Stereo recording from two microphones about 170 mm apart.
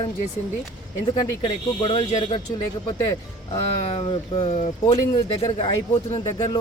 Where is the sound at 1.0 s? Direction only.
25° left (ahead or behind).